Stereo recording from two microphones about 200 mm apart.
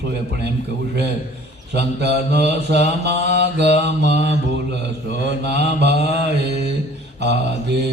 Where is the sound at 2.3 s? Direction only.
35° left (ahead or behind).